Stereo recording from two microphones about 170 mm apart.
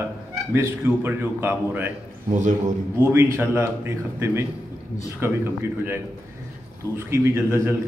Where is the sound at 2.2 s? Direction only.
45° right (ahead or behind).